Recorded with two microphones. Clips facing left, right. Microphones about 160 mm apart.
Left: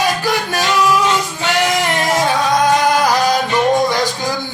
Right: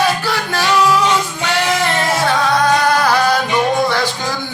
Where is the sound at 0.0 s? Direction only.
15° left (ahead or behind).